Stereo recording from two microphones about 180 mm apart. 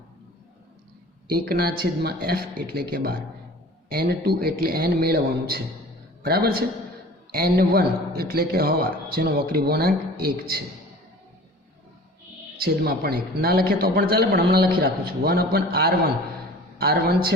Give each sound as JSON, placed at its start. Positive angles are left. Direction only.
{"t": 1.3, "sound": "a man's voice", "side_deg": -60}
{"t": 12.5, "sound": "a man's voice", "side_deg": -60}